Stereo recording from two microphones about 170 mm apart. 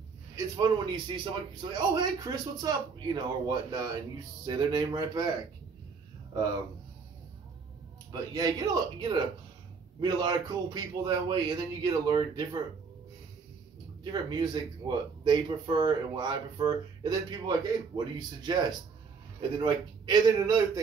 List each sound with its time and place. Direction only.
0.6 s speech: 25° right (ahead or behind)
8.1 s speech: 20° right (ahead or behind)
14.1 s speech: 25° right (ahead or behind)